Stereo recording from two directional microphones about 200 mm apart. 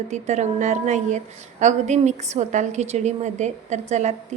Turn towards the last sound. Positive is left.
turn(degrees=-35)  # may be behind; listen again after turning